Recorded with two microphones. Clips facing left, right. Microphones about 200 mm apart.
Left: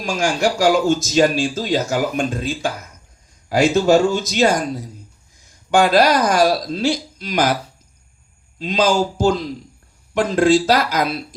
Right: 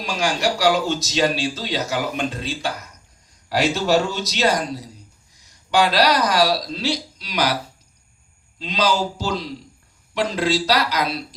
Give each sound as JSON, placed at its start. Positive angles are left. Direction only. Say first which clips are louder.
{"t": 0.0, "sound": "speech", "louder": "left 3 dB", "side_deg": 50}
{"t": 8.5, "sound": "speech", "louder": "left 4 dB", "side_deg": 50}